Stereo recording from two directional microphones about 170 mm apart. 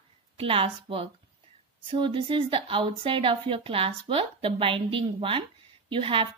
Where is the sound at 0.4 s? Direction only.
35° right (ahead or behind).